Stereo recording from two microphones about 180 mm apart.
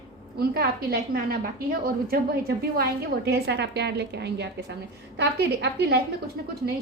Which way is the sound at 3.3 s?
70° right (ahead or behind).